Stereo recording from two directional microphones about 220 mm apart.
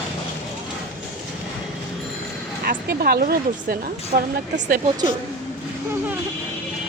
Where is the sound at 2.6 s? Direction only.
45° right (ahead or behind).